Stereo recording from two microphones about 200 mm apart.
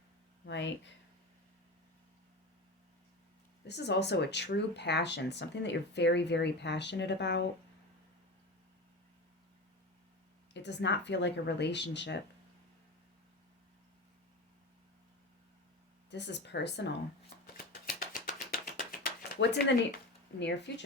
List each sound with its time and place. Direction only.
0.4 s speech: 60° left (ahead or behind)
3.7 s speech: 55° left (ahead or behind)
10.5 s speech: 60° left (ahead or behind)
16.0 s speech: 60° left (ahead or behind)
18.1 s a sound: 45° left (ahead or behind); by 19.7 s 60° left (ahead or behind)
20.4 s speech: 60° left (ahead or behind)